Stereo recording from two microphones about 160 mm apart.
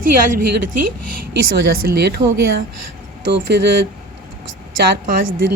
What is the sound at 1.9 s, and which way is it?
Speech, 85° right.